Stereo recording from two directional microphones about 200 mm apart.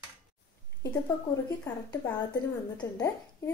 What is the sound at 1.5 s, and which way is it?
A woman's voice, 15° left (ahead or behind).